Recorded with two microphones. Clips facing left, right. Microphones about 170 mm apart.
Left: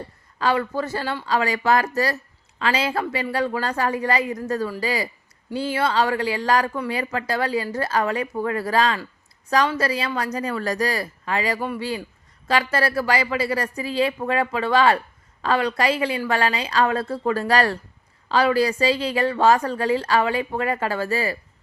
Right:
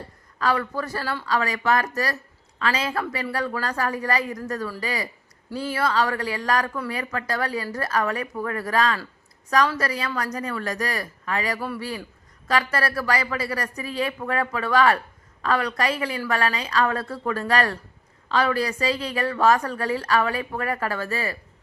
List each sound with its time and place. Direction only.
0.3 s speech: 30° left (ahead or behind)